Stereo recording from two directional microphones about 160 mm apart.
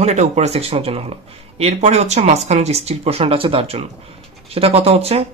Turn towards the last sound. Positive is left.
turn(degrees=-40)  # may be behind; listen again after turning